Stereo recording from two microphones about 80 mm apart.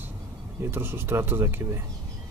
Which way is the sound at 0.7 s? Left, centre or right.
Right.